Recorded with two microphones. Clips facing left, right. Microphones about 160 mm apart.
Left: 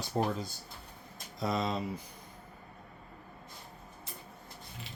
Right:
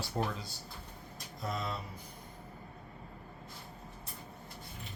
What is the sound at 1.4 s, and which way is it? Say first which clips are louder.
Speech: left 6 dB; 90° left.